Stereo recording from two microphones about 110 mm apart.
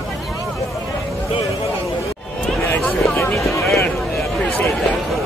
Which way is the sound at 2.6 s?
15° left (ahead or behind).